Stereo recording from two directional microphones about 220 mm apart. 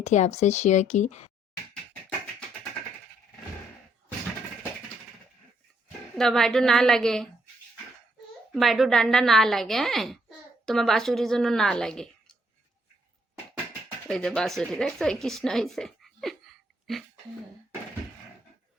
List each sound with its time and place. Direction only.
0.0 s speech: 30° left (ahead or behind)
6.1 s a woman's voice: centre (ahead or behind)
8.5 s a woman's voice: centre (ahead or behind)
14.1 s a woman's voice: 5° left (ahead or behind)